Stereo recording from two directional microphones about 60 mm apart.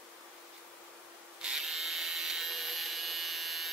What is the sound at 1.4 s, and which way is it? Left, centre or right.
Tools, centre.